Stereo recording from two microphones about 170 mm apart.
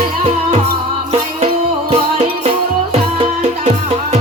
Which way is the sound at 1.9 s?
40° right (ahead or behind).